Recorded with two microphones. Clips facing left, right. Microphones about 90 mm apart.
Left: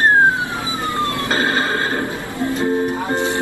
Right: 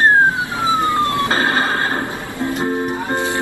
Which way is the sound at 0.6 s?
25° right (ahead or behind).